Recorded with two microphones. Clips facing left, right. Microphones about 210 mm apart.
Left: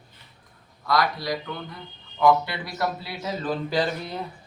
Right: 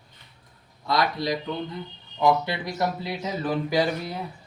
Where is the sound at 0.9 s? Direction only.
20° right (ahead or behind).